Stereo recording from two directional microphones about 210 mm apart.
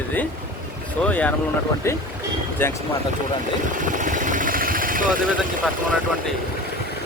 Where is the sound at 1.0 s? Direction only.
10° left (ahead or behind).